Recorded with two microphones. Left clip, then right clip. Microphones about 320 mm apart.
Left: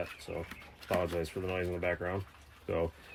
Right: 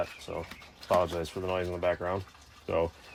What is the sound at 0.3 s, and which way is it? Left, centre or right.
Speech, centre.